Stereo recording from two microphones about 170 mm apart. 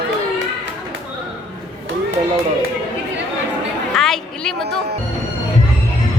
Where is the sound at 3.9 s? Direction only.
5° left (ahead or behind).